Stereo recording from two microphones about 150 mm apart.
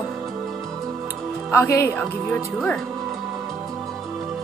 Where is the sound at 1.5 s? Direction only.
15° left (ahead or behind).